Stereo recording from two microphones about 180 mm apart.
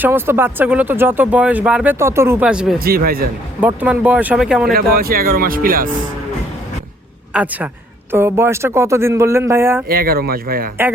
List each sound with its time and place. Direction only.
0.0 s speech: 10° right (ahead or behind)
2.8 s speech: 55° right (ahead or behind)
3.6 s speech: 10° right (ahead or behind)
4.7 s speech: 55° right (ahead or behind)
7.3 s speech: 5° right (ahead or behind)
9.9 s speech: 55° right (ahead or behind)